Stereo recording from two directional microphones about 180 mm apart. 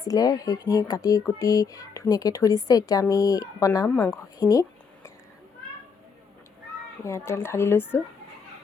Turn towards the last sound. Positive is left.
turn(degrees=15)  # may be behind; listen again after turning